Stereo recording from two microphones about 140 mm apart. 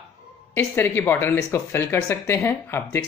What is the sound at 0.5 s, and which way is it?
Speech, 15° left (ahead or behind).